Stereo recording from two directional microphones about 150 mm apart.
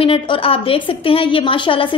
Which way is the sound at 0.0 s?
35° left (ahead or behind).